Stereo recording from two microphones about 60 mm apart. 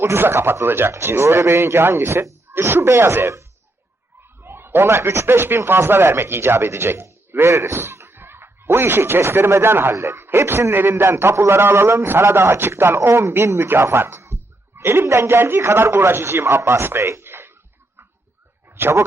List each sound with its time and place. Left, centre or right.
0.0 s a man's voice: right
4.4 s a man's voice: right
18.8 s speech: right